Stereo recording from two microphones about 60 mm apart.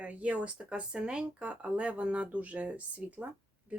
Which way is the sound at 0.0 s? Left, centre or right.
Right.